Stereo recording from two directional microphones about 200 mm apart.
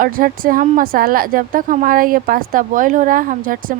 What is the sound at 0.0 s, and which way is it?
Speech, 45° right (ahead or behind).